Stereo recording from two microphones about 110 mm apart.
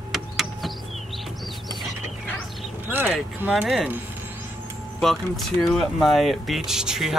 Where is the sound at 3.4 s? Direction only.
15° right (ahead or behind).